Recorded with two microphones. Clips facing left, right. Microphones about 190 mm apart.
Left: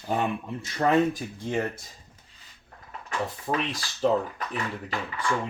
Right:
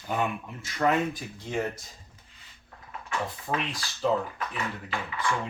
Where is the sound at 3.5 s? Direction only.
40° left (ahead or behind).